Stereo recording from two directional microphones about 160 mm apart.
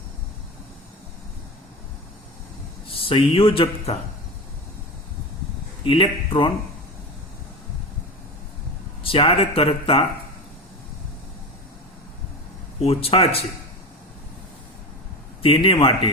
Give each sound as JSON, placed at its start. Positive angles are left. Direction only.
{"t": 2.8, "sound": "speech", "side_deg": 35}
{"t": 5.8, "sound": "speech", "side_deg": 35}
{"t": 9.0, "sound": "speech", "side_deg": 35}
{"t": 12.8, "sound": "speech", "side_deg": 35}
{"t": 15.4, "sound": "speech", "side_deg": 35}